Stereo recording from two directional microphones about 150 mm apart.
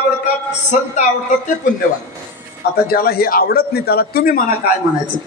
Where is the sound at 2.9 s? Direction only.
90° left; by 4.5 s 70° left (ahead or behind).